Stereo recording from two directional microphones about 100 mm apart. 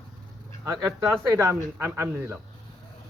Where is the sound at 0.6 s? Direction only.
35° right (ahead or behind).